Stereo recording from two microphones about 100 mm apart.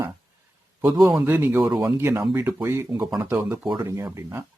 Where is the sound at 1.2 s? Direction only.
20° right (ahead or behind).